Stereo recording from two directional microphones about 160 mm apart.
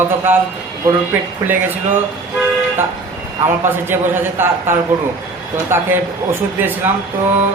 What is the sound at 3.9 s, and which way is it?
Speech, 10° right (ahead or behind).